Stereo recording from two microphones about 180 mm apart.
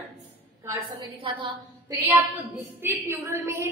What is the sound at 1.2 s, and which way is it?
Speech, 30° right (ahead or behind).